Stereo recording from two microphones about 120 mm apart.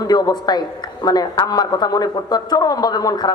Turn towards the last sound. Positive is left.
turn(degrees=35)  # may be behind; listen again after turning